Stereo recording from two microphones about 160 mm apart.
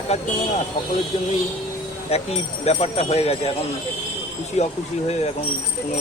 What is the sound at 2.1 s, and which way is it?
Speech, 40° left (ahead or behind).